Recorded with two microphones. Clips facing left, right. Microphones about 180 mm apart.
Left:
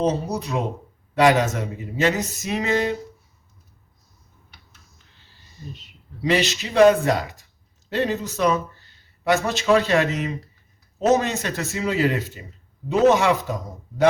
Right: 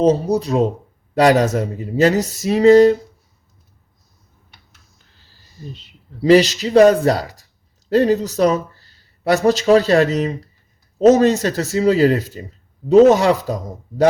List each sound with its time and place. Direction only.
0.0 s speech: 30° right (ahead or behind)
6.2 s speech: 35° right (ahead or behind)